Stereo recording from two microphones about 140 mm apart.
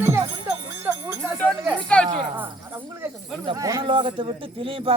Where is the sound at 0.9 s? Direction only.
20° right (ahead or behind).